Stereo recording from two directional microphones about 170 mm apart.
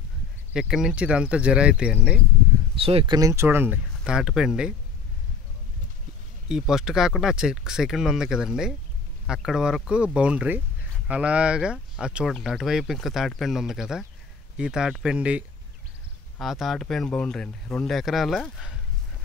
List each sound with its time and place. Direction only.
0.5 s speech: 5° right (ahead or behind)
2.7 s speech: 35° right (ahead or behind)
3.2 s speech: 15° right (ahead or behind)
6.5 s speech: 5° right (ahead or behind)